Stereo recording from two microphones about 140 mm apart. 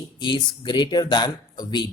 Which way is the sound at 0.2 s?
30° left (ahead or behind).